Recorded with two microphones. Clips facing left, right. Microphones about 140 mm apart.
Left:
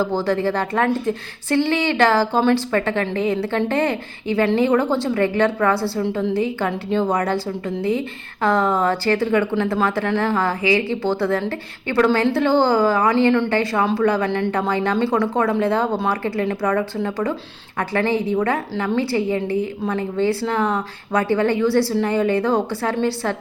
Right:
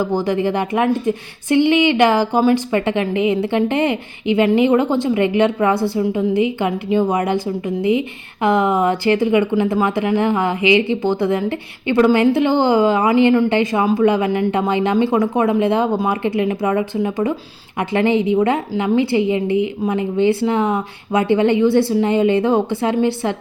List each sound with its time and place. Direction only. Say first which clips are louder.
0.0 s a woman's voice: right 2 dB; 15° right (ahead or behind)